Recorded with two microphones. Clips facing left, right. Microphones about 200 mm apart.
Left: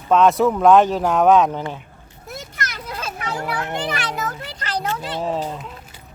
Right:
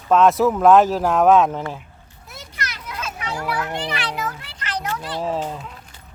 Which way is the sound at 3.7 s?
45° left (ahead or behind).